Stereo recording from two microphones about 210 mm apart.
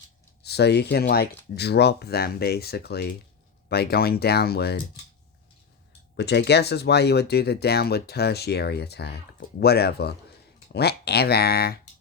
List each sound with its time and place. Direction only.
0.4 s speech: 50° left (ahead or behind)
6.1 s speech: 55° left (ahead or behind)